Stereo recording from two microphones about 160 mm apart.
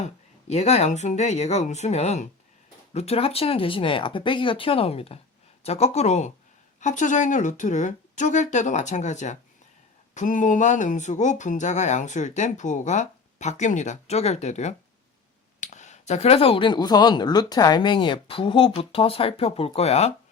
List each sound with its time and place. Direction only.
0.0 s speech: 40° left (ahead or behind)